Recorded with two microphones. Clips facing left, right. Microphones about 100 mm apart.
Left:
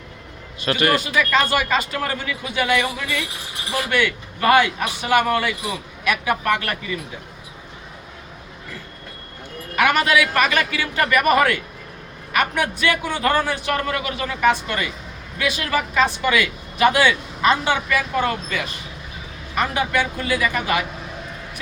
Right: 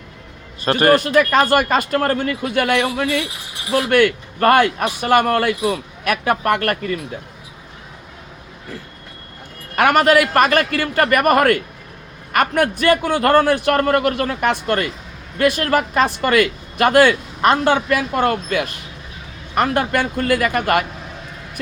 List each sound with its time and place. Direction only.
0.6 s speech: 40° right (ahead or behind)
9.7 s speech: 45° right (ahead or behind)